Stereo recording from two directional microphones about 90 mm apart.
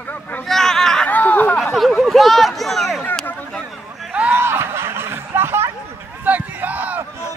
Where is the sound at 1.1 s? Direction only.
20° left (ahead or behind).